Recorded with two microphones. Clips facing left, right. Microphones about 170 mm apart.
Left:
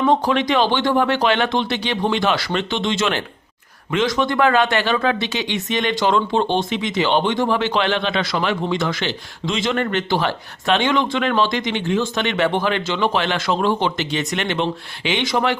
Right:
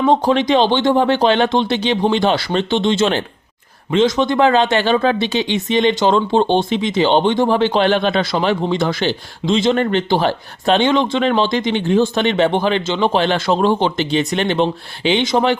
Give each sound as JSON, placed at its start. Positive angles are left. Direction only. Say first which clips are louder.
{"t": 0.0, "sound": "speech", "louder": "right 3 dB", "side_deg": -25}